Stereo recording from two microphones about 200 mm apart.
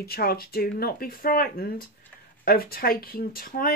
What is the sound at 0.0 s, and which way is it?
Speech, 50° left (ahead or behind).